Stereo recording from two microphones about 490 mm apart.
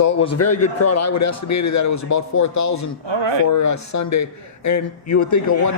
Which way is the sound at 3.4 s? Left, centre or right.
Left.